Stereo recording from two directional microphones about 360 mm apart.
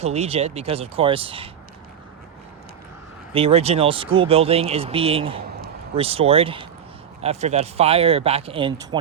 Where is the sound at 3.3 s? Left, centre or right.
Centre.